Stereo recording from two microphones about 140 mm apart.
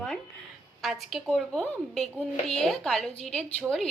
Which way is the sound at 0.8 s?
Centre (ahead or behind).